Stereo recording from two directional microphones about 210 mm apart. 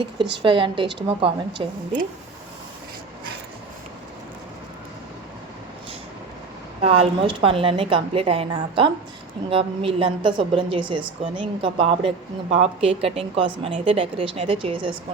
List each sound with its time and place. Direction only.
0.4 s a woman's voice: 25° right (ahead or behind)
6.8 s a woman's voice: 25° right (ahead or behind)